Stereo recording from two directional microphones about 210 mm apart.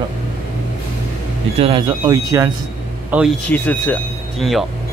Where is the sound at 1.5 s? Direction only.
25° right (ahead or behind); by 3.3 s 10° right (ahead or behind).